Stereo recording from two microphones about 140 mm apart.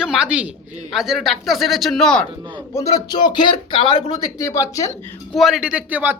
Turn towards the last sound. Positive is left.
turn(degrees=-10)  # may be behind; listen again after turning